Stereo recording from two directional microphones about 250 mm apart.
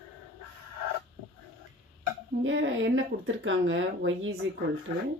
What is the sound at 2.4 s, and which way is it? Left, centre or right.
Speech, right.